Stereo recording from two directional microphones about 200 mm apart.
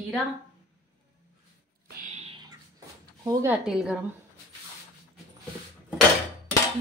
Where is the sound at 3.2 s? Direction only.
15° right (ahead or behind).